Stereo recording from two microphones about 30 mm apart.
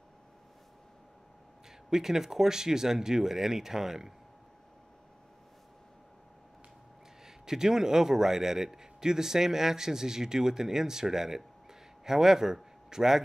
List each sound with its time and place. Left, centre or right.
1.9 s a man's voice: centre
7.2 s a man's voice: centre